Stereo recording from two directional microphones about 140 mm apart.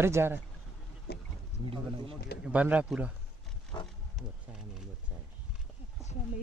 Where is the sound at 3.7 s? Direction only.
30° left (ahead or behind).